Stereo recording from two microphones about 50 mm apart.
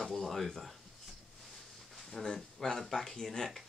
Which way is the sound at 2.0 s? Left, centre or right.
Centre.